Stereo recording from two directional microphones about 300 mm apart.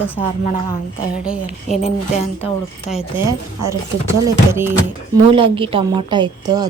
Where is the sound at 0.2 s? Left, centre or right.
Centre.